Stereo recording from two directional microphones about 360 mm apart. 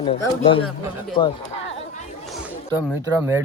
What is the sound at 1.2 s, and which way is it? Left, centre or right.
Speech, centre.